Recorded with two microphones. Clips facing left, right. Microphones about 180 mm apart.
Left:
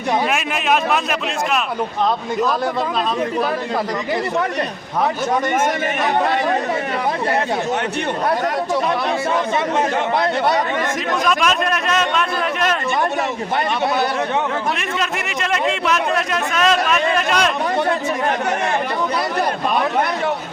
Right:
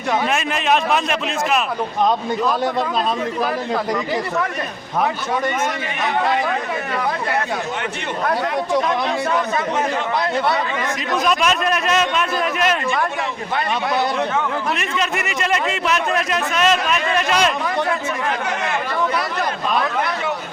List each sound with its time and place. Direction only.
0.3 s speech: 5° left (ahead or behind)
11.3 s speech: centre (ahead or behind)
14.8 s speech: centre (ahead or behind)